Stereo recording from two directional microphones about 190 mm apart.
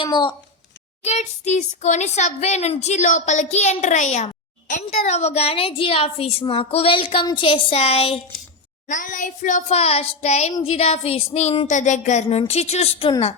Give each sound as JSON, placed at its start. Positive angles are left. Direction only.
{"t": 0.0, "sound": "speech", "side_deg": 25}
{"t": 1.0, "sound": "a woman's voice", "side_deg": 35}
{"t": 8.9, "sound": "a woman's voice", "side_deg": 45}